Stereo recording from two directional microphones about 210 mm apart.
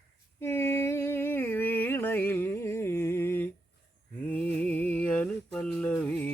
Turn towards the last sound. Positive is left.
turn(degrees=5)  # may be behind; listen again after turning